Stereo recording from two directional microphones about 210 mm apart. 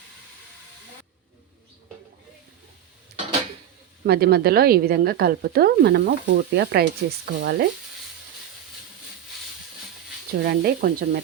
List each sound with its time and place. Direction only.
4.0 s speech: 50° right (ahead or behind)
10.4 s speech: 45° right (ahead or behind)